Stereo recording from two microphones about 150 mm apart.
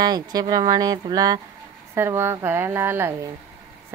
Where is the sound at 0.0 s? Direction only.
25° right (ahead or behind).